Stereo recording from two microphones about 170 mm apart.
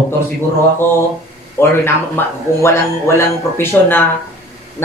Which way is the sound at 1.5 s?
15° left (ahead or behind).